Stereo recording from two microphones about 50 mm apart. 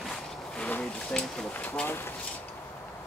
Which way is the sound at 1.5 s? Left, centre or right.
Left.